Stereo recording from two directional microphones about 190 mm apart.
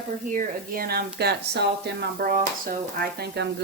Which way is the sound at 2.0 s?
50° right (ahead or behind).